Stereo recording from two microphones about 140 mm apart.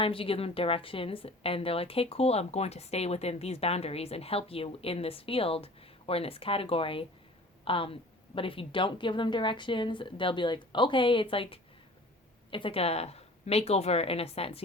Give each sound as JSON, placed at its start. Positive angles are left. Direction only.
{"t": 0.0, "sound": "a woman's voice", "side_deg": 40}